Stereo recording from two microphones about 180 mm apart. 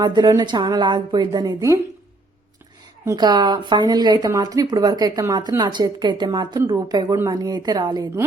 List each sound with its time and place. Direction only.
0.0 s speech: 20° right (ahead or behind)
3.1 s speech: 25° right (ahead or behind)